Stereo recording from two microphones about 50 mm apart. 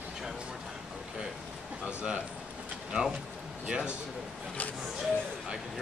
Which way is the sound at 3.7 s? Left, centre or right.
Centre.